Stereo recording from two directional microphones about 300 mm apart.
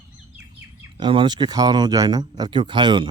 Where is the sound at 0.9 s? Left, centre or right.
Centre.